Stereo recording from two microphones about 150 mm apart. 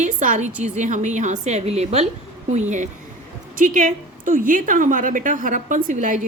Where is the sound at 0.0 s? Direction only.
55° right (ahead or behind).